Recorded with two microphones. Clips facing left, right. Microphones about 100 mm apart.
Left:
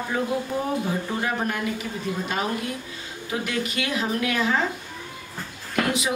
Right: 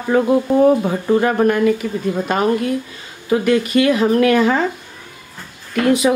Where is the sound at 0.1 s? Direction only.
70° right (ahead or behind).